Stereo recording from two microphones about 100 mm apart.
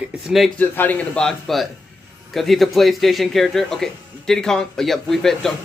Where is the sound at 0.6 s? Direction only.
15° left (ahead or behind).